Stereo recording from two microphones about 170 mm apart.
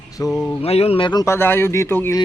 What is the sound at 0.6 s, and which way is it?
Speech, 35° left (ahead or behind).